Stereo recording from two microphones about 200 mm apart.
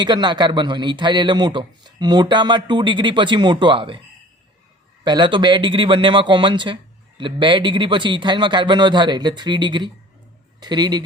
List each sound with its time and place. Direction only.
0.0 s a man's voice: 20° right (ahead or behind)
5.0 s a man's voice: 25° right (ahead or behind)